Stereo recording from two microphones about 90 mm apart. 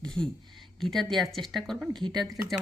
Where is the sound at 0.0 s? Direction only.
10° left (ahead or behind).